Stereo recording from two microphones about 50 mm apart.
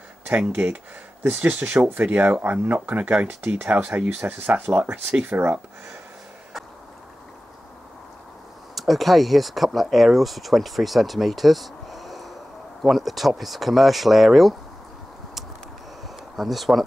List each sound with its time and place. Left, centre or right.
0.4 s speech: right
2.4 s speech: right
8.7 s speech: centre
16.3 s speech: centre